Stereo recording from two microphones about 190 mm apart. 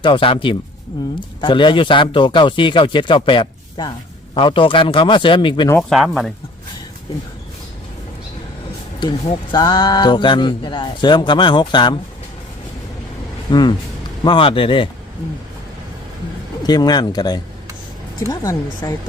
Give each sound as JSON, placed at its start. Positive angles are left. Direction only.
{"t": 0.0, "sound": "speech", "side_deg": 25}
{"t": 5.9, "sound": "speech", "side_deg": 0}
{"t": 9.0, "sound": "speech", "side_deg": 25}
{"t": 13.5, "sound": "speech", "side_deg": 25}
{"t": 16.6, "sound": "speech", "side_deg": 20}